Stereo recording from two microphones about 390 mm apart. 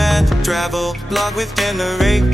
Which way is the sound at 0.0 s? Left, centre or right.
Centre.